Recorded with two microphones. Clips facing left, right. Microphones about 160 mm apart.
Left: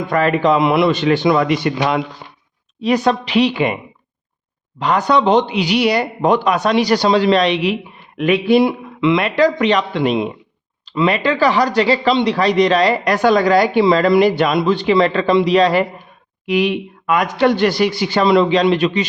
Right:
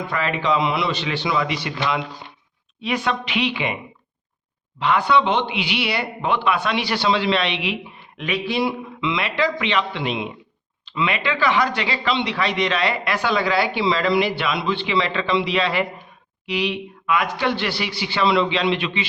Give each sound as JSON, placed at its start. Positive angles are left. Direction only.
{"t": 0.1, "sound": "a man's voice", "side_deg": 45}
{"t": 2.2, "sound": "a sound", "side_deg": 50}
{"t": 2.8, "sound": "speech", "side_deg": 40}
{"t": 4.8, "sound": "a man's voice", "side_deg": 40}